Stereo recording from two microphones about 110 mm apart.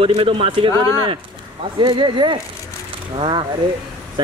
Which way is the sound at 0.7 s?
30° left (ahead or behind).